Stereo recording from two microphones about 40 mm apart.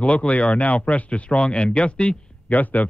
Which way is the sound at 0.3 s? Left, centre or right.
Left.